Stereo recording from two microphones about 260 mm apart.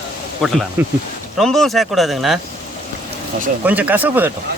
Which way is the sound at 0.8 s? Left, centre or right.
Centre.